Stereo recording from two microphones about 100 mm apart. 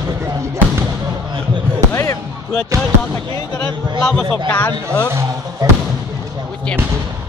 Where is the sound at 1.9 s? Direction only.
30° left (ahead or behind).